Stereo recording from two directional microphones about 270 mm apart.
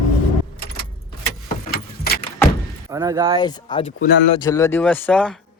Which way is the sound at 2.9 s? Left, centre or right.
Centre.